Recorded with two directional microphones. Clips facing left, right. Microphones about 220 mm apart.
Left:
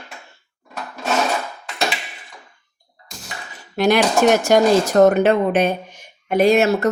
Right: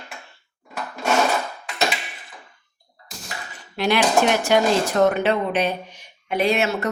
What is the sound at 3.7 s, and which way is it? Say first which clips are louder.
Speech: left 3 dB; 45° left (ahead or behind).